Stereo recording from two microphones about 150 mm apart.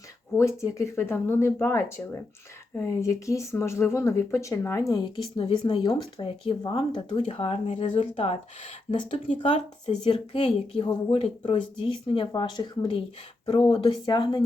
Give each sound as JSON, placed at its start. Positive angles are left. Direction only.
{"t": 0.3, "sound": "speech", "side_deg": 20}
{"t": 9.8, "sound": "speech", "side_deg": 35}